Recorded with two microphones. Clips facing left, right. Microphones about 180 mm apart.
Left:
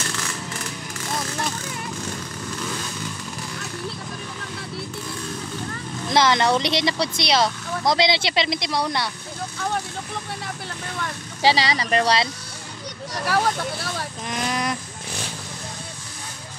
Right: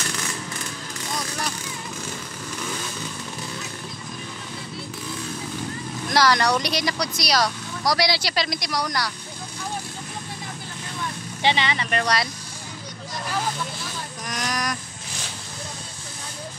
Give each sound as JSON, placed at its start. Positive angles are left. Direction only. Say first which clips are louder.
{"t": 6.0, "sound": "speech", "louder": "left 1 dB", "side_deg": 25}
{"t": 11.4, "sound": "speech", "louder": "left 3 dB", "side_deg": 35}
{"t": 13.1, "sound": "speech", "louder": "left 6 dB", "side_deg": 70}
{"t": 14.2, "sound": "a sound", "louder": "left 2 dB", "side_deg": 25}